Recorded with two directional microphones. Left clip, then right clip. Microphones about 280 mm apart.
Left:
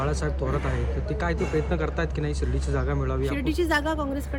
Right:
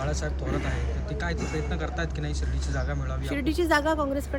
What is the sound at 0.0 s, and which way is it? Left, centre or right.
A man's voice, left.